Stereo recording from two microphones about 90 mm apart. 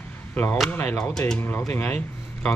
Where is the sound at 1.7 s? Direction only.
25° left (ahead or behind).